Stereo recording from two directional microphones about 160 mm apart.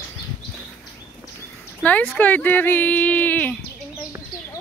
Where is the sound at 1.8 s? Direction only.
10° left (ahead or behind).